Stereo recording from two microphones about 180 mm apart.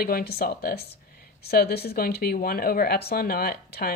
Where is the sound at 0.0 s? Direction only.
55° left (ahead or behind).